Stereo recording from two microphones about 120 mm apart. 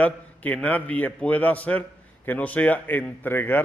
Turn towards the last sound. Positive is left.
turn(degrees=15)  # may be behind; listen again after turning